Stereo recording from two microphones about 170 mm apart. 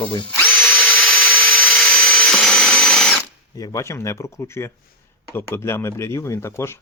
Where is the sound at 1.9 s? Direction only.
5° left (ahead or behind).